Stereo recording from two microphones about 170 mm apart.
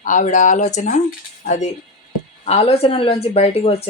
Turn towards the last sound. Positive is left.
turn(degrees=35)  # may be behind; listen again after turning